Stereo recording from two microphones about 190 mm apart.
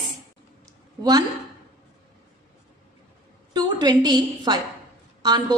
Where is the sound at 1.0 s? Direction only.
20° right (ahead or behind).